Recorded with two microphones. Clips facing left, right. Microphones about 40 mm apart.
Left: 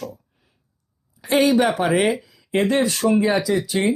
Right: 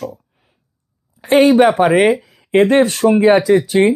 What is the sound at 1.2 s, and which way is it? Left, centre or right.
Speech, right.